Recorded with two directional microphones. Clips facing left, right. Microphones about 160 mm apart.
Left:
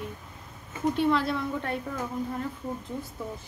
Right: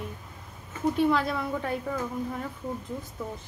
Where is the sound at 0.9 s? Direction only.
Centre (ahead or behind).